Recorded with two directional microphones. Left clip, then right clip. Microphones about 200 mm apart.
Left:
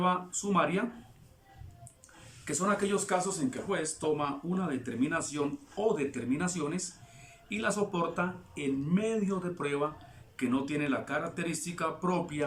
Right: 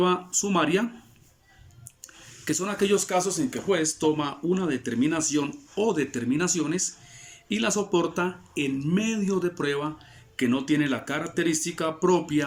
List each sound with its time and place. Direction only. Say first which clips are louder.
0.0 s speech: right 6 dB; 15° right (ahead or behind)
2.4 s speech: right 4 dB; 15° right (ahead or behind)